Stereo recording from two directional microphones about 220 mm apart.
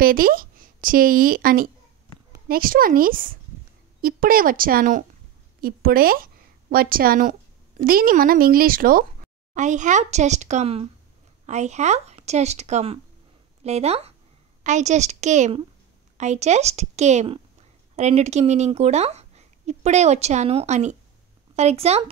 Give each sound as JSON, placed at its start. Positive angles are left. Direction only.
{"t": 0.0, "sound": "a woman's voice", "side_deg": -40}